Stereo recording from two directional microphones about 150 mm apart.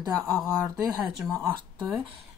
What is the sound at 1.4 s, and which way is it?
Speech, 10° right (ahead or behind).